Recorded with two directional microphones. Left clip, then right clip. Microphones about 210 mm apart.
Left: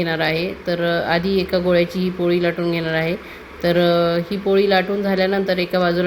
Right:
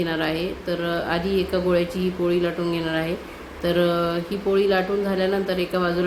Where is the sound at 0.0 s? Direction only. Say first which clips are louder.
Left 4 dB; 15° left (ahead or behind).